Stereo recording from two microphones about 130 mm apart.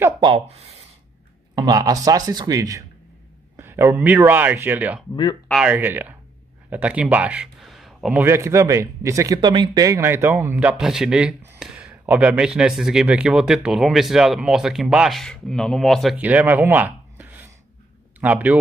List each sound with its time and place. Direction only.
0.2 s speech: 45° right (ahead or behind)
1.5 s speech: 30° right (ahead or behind); by 5.0 s 15° right (ahead or behind)
5.1 s speech: 35° left (ahead or behind)
5.5 s speech: 10° right (ahead or behind)
7.6 s a sound: centre (ahead or behind)
8.2 s speech: 20° right (ahead or behind); by 16.2 s centre (ahead or behind)
16.2 s speech: 10° right (ahead or behind)